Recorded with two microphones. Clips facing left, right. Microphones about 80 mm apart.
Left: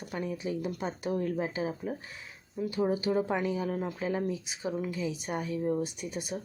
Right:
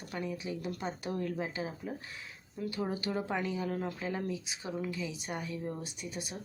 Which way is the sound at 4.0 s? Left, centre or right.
Left.